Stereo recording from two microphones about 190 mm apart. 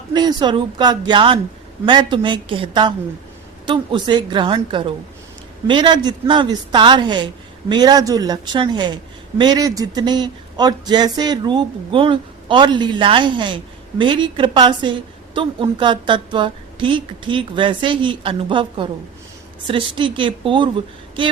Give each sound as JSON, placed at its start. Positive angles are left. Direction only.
{"t": 0.1, "sound": "a woman's voice", "side_deg": -20}